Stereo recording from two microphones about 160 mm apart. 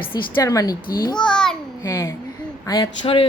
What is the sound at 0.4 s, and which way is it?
Speech, 20° left (ahead or behind).